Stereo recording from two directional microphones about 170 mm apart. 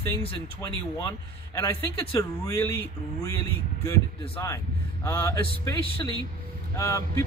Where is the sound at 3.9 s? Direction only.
15° left (ahead or behind).